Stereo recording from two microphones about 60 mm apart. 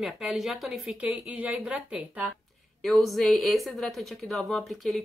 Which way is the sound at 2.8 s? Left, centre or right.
Centre.